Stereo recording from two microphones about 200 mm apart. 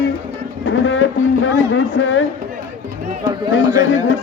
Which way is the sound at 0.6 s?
75° left (ahead or behind).